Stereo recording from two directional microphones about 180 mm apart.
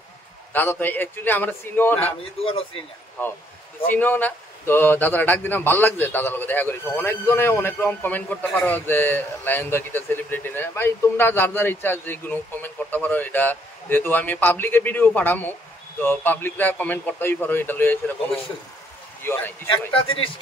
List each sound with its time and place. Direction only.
0.5 s a man's voice: 10° left (ahead or behind)
2.4 s speech: 30° left (ahead or behind)
3.9 s a man's voice: 10° left (ahead or behind)